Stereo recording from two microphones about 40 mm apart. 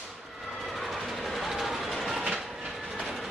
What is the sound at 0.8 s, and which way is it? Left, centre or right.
Train, centre.